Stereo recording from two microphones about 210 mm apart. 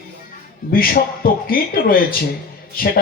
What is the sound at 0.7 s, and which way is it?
A man's voice, 45° left (ahead or behind).